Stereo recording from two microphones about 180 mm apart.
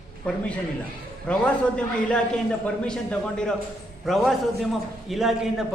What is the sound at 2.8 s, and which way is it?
A man's voice, 5° left (ahead or behind).